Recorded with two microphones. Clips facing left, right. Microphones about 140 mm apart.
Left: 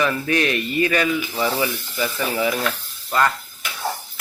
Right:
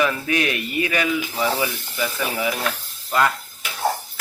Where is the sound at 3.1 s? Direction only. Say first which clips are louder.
Even; 5° right (ahead or behind).